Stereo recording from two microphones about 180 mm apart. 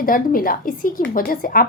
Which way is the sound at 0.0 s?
50° left (ahead or behind).